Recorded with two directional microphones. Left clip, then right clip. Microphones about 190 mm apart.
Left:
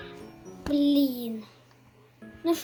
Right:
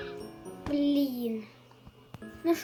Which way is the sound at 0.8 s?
25° left (ahead or behind).